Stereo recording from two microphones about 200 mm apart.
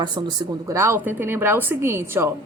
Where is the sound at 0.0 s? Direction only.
20° right (ahead or behind).